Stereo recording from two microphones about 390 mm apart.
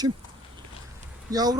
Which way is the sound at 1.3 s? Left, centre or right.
Centre.